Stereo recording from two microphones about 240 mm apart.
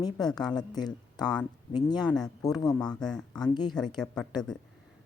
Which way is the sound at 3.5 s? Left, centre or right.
Centre.